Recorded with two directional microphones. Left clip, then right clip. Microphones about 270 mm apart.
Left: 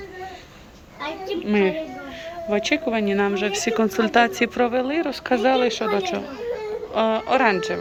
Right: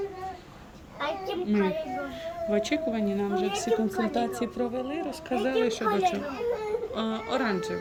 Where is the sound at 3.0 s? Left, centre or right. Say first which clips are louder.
Left 9 dB; left.